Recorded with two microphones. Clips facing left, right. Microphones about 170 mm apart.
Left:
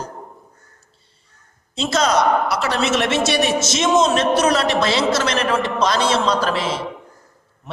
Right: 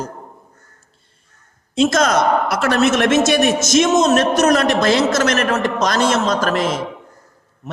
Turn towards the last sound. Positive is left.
turn(degrees=-50)  # may be behind; listen again after turning